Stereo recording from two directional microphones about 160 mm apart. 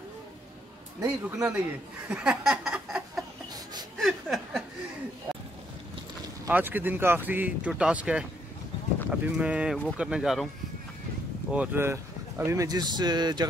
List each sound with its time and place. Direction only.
1.0 s speech: 10° right (ahead or behind)
2.0 s a sound: 5° right (ahead or behind)
4.0 s chuckle: centre (ahead or behind)
6.4 s speech: 10° right (ahead or behind)
11.5 s speech: 10° right (ahead or behind); by 13.5 s 25° right (ahead or behind)